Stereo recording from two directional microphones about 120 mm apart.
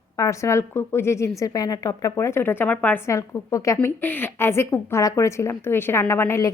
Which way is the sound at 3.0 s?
25° left (ahead or behind).